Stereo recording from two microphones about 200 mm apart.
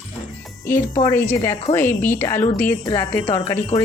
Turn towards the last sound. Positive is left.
turn(degrees=20)  # may be behind; listen again after turning